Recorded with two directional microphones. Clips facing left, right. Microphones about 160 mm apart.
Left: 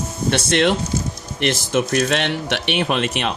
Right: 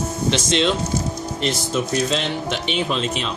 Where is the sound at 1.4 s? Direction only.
75° left (ahead or behind).